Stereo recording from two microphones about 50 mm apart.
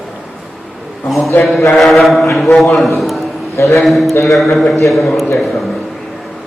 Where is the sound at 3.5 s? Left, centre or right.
Left.